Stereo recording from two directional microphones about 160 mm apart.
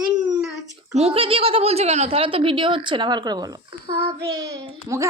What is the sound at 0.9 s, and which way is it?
A child's voice, 40° right (ahead or behind).